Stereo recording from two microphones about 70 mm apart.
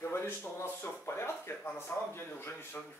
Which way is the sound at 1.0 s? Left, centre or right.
Left.